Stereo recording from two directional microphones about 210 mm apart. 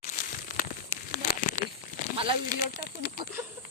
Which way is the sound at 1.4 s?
45° left (ahead or behind).